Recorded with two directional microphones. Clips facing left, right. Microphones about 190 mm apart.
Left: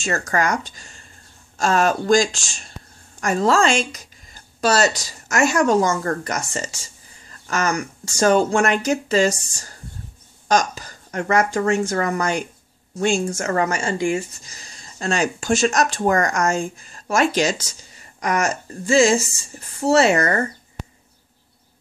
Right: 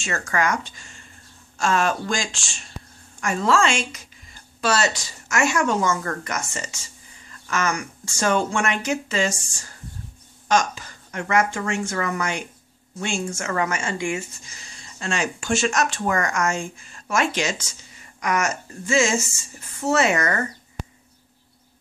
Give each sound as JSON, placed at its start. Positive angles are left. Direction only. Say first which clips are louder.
{"t": 0.0, "sound": "a woman's voice", "louder": "left 3 dB", "side_deg": 35}